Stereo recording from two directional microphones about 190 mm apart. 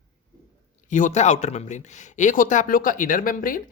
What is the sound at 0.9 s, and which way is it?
Speech, 40° left (ahead or behind).